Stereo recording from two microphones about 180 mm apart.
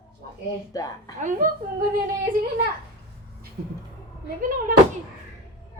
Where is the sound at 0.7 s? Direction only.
20° left (ahead or behind).